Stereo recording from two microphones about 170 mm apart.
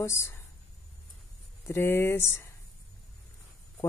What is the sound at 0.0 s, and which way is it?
Speech, 15° left (ahead or behind).